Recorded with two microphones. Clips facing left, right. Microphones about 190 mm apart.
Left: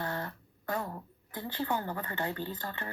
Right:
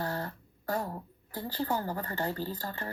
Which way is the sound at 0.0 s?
35° right (ahead or behind).